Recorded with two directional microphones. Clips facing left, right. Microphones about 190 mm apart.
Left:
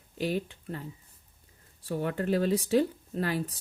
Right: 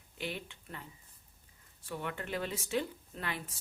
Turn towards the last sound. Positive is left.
turn(degrees=35)  # may be behind; listen again after turning